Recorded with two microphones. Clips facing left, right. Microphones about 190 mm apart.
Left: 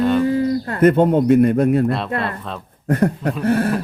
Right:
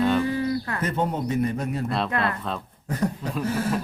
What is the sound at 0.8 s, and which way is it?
Speech, 60° left (ahead or behind).